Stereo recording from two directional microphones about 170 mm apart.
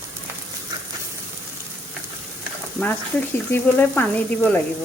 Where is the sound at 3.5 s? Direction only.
10° left (ahead or behind).